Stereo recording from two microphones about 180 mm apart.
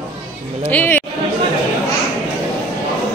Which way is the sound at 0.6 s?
10° left (ahead or behind).